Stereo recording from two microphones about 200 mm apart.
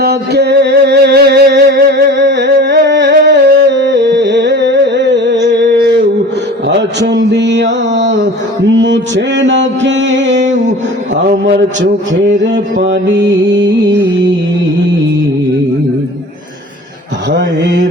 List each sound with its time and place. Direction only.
0.0 s music: 55° right (ahead or behind)
6.7 s mantra: 60° right (ahead or behind)
17.3 s mantra: 60° right (ahead or behind)